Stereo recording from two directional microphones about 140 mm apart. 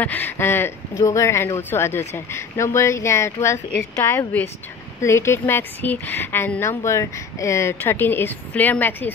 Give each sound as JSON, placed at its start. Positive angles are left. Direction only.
{"t": 0.0, "sound": "a woman's voice", "side_deg": 15}